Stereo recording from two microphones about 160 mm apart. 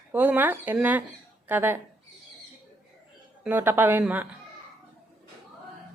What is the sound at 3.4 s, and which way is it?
Speech, 10° right (ahead or behind).